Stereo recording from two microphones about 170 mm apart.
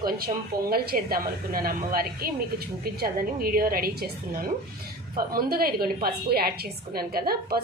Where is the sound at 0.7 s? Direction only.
60° right (ahead or behind).